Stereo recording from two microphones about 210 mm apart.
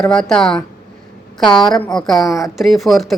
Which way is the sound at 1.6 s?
5° left (ahead or behind).